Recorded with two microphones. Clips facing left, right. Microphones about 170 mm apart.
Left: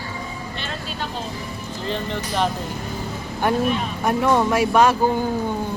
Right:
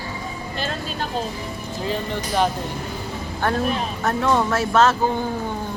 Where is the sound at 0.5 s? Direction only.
40° right (ahead or behind).